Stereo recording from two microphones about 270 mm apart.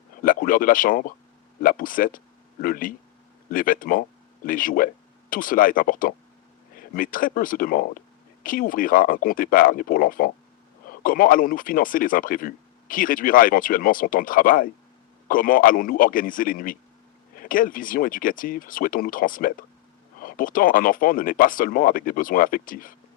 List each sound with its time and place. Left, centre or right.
0.2 s speech: left